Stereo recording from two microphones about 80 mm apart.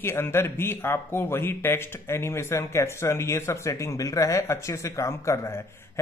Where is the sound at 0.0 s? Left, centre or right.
Left.